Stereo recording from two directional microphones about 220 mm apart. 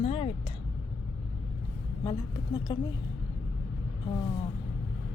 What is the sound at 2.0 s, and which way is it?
Speech, 20° left (ahead or behind).